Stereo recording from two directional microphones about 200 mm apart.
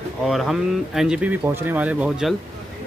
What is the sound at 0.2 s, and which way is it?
Speech, centre (ahead or behind).